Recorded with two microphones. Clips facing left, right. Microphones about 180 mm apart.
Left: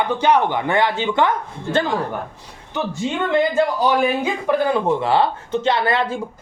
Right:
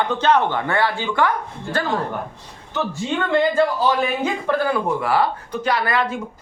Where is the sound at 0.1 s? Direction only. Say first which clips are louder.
Left 2 dB; 10° left (ahead or behind).